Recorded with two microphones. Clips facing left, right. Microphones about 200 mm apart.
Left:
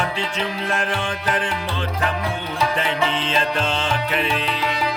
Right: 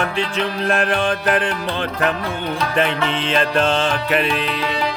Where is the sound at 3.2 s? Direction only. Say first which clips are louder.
Right 5 dB; 60° right (ahead or behind).